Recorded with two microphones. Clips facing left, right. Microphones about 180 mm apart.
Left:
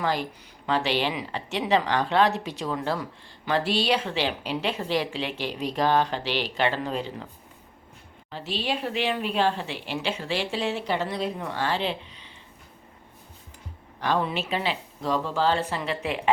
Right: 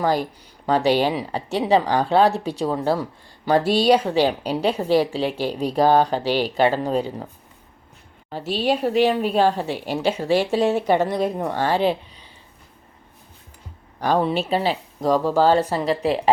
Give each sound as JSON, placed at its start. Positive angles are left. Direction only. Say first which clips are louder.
{"t": 0.0, "sound": "a woman's voice", "louder": "right 6 dB", "side_deg": -40}
{"t": 8.3, "sound": "a woman's voice", "louder": "right 8 dB", "side_deg": -45}
{"t": 14.0, "sound": "a woman's voice", "louder": "right 6 dB", "side_deg": -40}